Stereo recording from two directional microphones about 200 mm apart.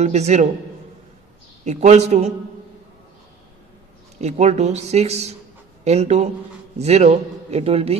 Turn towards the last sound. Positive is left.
turn(degrees=-30)  # may be behind; listen again after turning